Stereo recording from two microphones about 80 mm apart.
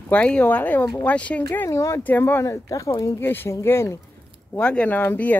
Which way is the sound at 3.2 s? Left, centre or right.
Left.